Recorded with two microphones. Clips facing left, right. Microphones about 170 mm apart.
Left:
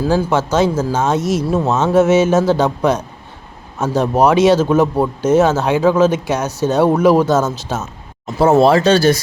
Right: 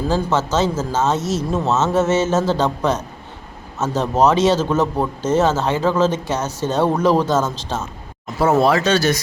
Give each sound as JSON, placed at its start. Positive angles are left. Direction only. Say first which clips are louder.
{"t": 0.0, "sound": "speech", "louder": "left 4 dB", "side_deg": 10}
{"t": 8.4, "sound": "speech", "louder": "left 5 dB", "side_deg": 30}